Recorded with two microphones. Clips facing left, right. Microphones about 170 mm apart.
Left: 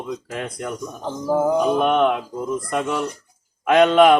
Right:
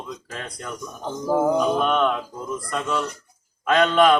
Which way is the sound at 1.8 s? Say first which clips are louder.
Left 3 dB; 20° left (ahead or behind).